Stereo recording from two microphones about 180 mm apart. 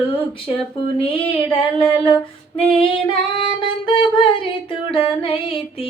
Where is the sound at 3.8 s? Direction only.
25° left (ahead or behind).